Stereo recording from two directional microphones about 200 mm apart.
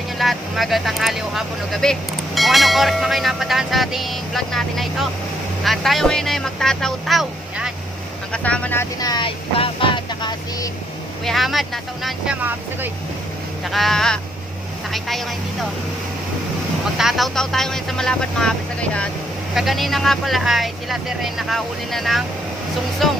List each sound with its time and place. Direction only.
0.2 s speech: centre (ahead or behind)
9.0 s vehicle: 20° left (ahead or behind)
11.2 s speech: centre (ahead or behind)
17.0 s speech: centre (ahead or behind)